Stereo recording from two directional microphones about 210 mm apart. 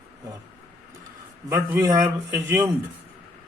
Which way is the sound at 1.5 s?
15° right (ahead or behind).